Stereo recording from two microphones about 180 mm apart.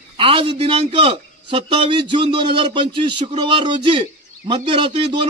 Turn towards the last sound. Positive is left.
turn(degrees=-25)  # may be behind; listen again after turning